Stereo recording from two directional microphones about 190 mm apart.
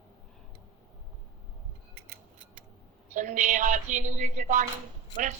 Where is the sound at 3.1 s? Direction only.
40° right (ahead or behind).